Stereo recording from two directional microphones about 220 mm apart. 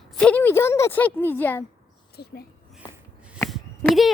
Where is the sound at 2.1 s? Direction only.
45° left (ahead or behind).